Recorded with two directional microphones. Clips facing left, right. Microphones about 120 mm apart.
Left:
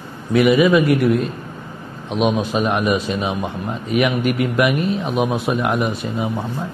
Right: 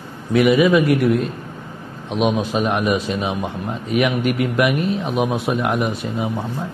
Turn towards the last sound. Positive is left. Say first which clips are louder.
# left 1 dB
turn(degrees=30)  # may be behind; listen again after turning